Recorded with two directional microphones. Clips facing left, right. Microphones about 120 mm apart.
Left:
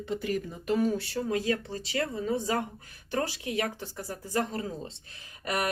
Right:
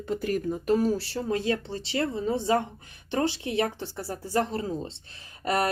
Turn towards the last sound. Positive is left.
turn(degrees=-30)  # may be behind; listen again after turning